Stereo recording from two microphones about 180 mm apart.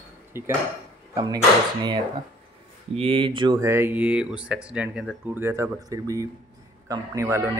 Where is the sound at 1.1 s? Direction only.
25° right (ahead or behind).